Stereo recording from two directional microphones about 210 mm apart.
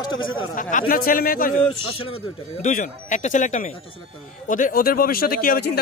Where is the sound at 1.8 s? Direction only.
90° left.